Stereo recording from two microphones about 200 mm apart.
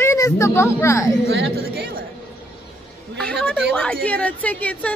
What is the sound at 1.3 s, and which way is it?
Speech, 55° right (ahead or behind).